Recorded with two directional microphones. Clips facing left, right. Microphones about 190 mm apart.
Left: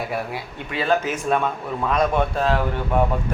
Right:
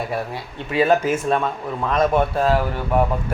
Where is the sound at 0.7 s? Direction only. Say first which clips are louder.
Right 4 dB; 40° right (ahead or behind).